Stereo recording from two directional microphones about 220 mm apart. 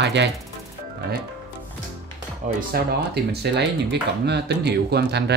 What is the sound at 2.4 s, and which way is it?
Speech, 35° right (ahead or behind).